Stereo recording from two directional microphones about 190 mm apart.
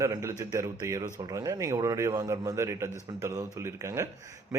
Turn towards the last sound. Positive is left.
turn(degrees=-15)  # may be behind; listen again after turning